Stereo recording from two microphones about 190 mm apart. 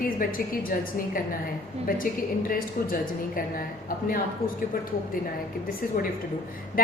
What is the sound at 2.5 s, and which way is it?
A woman's voice, 50° left (ahead or behind).